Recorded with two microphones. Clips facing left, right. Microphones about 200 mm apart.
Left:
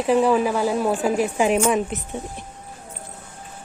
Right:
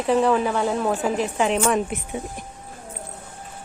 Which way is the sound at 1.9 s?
10° right (ahead or behind).